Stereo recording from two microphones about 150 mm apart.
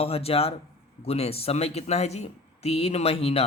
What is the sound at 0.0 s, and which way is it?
Speech, 40° left (ahead or behind).